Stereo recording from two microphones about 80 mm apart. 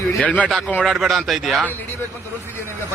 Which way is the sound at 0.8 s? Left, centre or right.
Centre.